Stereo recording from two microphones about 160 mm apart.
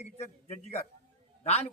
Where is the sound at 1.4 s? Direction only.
40° left (ahead or behind).